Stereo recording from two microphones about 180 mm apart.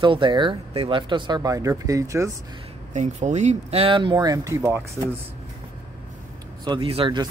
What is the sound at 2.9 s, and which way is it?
Speech, 40° right (ahead or behind).